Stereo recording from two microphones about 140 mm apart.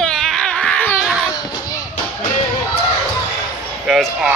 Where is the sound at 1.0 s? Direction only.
5° right (ahead or behind).